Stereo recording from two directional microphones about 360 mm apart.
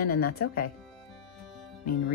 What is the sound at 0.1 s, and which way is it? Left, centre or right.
Speech, left.